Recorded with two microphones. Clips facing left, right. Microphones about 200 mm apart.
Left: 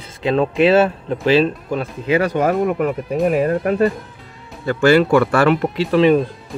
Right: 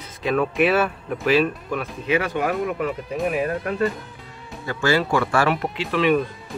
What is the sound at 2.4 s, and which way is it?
Speech, 45° left (ahead or behind).